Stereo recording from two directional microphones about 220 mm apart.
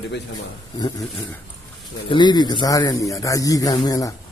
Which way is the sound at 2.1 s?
20° left (ahead or behind).